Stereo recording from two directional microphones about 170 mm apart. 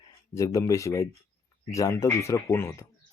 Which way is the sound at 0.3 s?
20° left (ahead or behind).